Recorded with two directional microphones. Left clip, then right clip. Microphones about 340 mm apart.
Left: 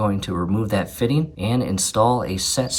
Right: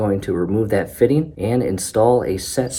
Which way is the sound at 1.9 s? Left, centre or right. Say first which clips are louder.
Right 3 dB; left.